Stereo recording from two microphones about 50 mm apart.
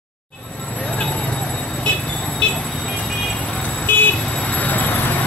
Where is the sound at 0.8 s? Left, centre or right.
Left.